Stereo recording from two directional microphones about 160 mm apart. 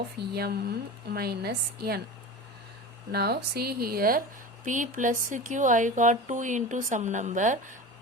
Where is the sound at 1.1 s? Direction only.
75° right (ahead or behind).